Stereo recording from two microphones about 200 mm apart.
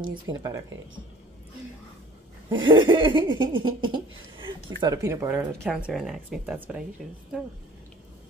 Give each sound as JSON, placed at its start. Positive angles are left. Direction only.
{"t": 0.0, "sound": "laughter", "side_deg": -20}
{"t": 2.5, "sound": "laughter", "side_deg": -25}
{"t": 3.8, "sound": "speech", "side_deg": -25}